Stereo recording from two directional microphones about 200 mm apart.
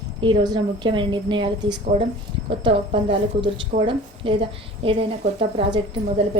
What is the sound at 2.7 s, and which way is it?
A woman's voice, 25° right (ahead or behind).